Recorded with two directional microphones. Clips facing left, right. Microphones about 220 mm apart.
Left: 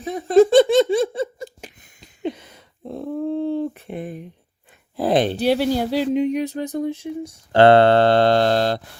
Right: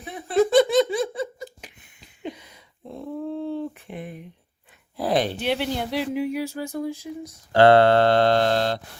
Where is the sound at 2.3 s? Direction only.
50° left (ahead or behind).